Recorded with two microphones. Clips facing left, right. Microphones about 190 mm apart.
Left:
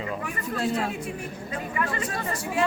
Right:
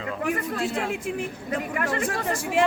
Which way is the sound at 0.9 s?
90° right.